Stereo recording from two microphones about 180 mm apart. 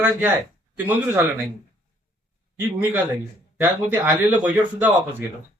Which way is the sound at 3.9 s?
10° right (ahead or behind).